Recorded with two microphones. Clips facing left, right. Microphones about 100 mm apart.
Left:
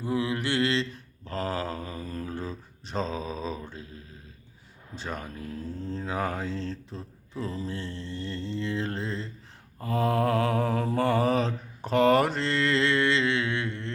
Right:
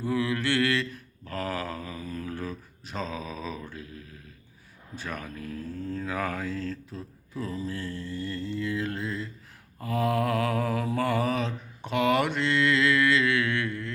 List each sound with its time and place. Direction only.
0.0 s mantra: 20° left (ahead or behind); by 2.3 s 35° left (ahead or behind)
2.3 s mantra: 25° left (ahead or behind)
4.9 s speech: 25° left (ahead or behind)
9.8 s mantra: 30° left (ahead or behind)